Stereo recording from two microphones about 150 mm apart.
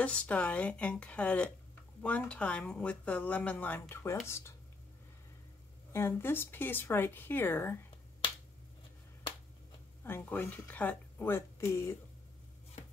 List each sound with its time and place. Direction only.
0.0 s speech: 10° left (ahead or behind)
5.9 s speech: 15° left (ahead or behind)
10.0 s speech: 15° left (ahead or behind)